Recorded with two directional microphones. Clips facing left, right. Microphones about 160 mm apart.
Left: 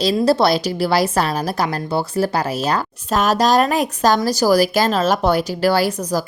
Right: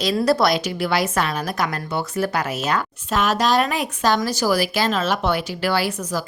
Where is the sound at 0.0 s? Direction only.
30° left (ahead or behind).